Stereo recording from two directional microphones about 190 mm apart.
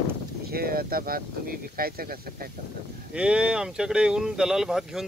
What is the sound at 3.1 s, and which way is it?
Speech, 5° right (ahead or behind).